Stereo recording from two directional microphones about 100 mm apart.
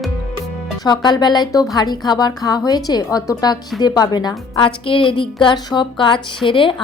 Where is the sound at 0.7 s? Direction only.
45° left (ahead or behind).